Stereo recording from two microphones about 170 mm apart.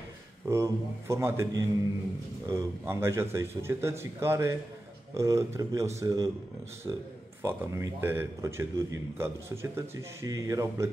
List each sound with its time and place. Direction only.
0.5 s a man's voice: 15° right (ahead or behind)